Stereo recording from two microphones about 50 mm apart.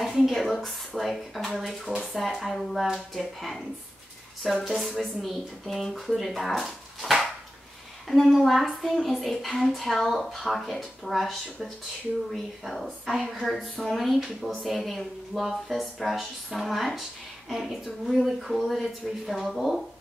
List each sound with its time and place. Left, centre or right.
0.0 s a woman's voice: centre